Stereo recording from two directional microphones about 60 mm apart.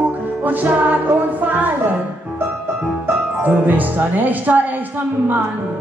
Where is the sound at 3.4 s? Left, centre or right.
Right.